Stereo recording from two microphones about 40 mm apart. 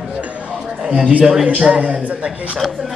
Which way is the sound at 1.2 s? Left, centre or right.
Centre.